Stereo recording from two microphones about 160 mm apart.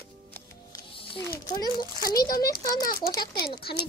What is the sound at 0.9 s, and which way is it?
Speech, 35° left (ahead or behind).